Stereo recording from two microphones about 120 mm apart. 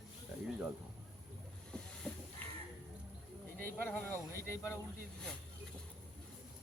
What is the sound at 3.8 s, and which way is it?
Speech, 20° left (ahead or behind).